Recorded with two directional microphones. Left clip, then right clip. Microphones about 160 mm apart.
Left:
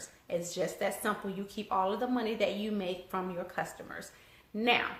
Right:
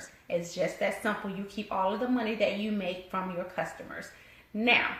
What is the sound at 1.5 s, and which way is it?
Speech, 20° left (ahead or behind).